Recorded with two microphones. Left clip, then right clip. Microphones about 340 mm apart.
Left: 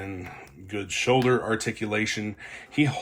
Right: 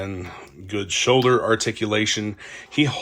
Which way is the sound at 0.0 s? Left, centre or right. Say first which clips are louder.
Right 5 dB; centre.